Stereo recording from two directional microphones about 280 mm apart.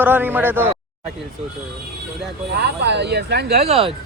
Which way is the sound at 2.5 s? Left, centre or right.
Right.